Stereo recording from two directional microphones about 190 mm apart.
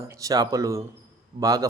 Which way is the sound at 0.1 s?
20° right (ahead or behind).